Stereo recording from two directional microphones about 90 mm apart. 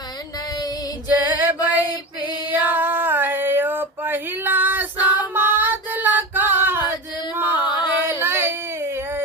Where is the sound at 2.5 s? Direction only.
20° right (ahead or behind).